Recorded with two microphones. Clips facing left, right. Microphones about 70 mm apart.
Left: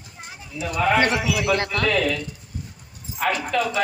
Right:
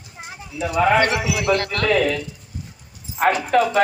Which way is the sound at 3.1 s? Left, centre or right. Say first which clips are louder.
Right 5 dB; right.